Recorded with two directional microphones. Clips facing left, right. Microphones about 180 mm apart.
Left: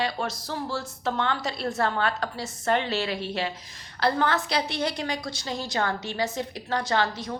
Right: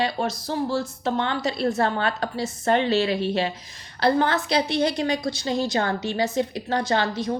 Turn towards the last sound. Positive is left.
turn(degrees=-25)  # may be behind; listen again after turning